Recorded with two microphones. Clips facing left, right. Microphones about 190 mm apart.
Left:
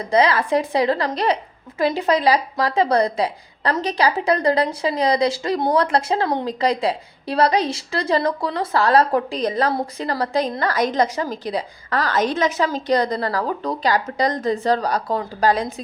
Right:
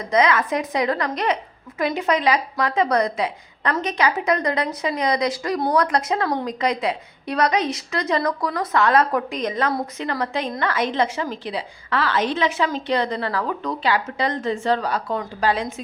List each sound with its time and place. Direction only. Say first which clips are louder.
0.0 s a woman's voice: left 1 dB; 30° left (ahead or behind)